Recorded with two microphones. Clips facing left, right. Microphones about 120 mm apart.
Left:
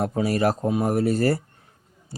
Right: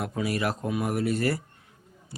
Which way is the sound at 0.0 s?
35° left (ahead or behind).